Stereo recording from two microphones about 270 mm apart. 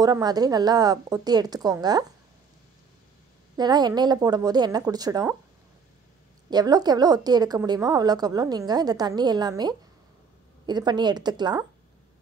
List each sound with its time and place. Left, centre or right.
0.0 s a woman's voice: centre
3.5 s a woman's voice: centre
6.5 s a woman's voice: centre